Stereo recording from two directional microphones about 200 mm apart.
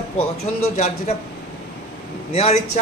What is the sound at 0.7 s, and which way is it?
Speech, 35° left (ahead or behind).